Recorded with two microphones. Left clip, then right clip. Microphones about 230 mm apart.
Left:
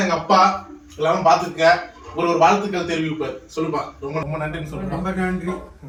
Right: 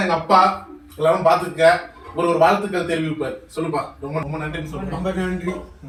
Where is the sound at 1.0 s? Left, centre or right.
Centre.